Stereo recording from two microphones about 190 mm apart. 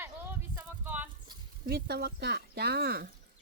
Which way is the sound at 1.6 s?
55° right (ahead or behind).